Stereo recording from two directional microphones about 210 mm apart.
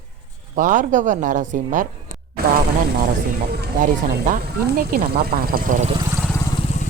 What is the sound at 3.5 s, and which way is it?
Speech, 45° right (ahead or behind).